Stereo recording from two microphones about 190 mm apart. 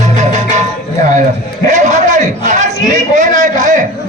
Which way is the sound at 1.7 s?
40° right (ahead or behind).